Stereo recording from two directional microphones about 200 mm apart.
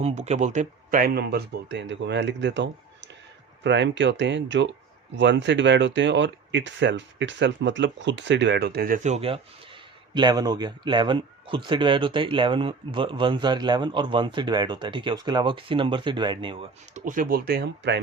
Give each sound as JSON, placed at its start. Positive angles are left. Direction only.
{"t": 0.0, "sound": "speech", "side_deg": -35}
{"t": 9.0, "sound": "speech", "side_deg": -30}
{"t": 10.2, "sound": "speech", "side_deg": -20}
{"t": 17.1, "sound": "speech", "side_deg": -45}